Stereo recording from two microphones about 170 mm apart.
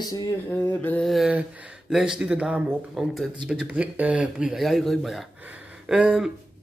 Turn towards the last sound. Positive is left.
turn(degrees=-5)  # may be behind; listen again after turning